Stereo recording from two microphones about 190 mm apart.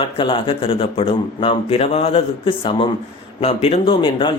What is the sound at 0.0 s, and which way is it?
A man's voice, 25° left (ahead or behind).